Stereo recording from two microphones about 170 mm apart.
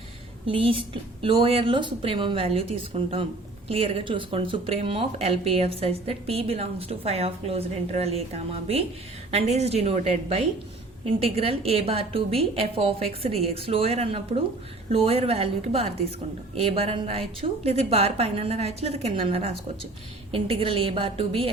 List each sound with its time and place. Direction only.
0.4 s speech: 30° right (ahead or behind)
3.7 s speech: 35° right (ahead or behind)